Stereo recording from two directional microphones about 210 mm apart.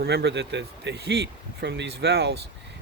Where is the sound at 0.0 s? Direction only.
50° right (ahead or behind).